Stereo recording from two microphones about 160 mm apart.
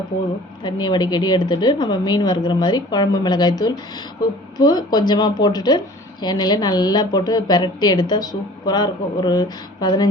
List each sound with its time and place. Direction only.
0.6 s a woman's voice: 25° left (ahead or behind)